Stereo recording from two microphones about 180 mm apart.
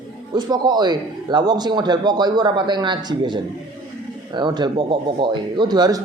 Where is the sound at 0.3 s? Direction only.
25° right (ahead or behind).